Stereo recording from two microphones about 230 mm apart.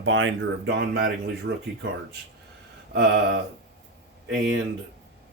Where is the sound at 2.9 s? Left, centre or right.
Right.